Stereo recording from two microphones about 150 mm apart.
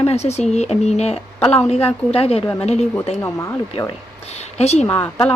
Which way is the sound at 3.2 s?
20° left (ahead or behind).